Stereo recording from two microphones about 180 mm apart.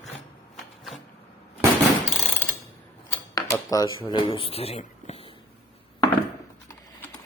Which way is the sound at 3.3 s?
20° left (ahead or behind).